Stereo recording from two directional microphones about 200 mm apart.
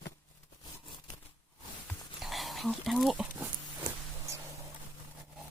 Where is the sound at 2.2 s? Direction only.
Centre (ahead or behind).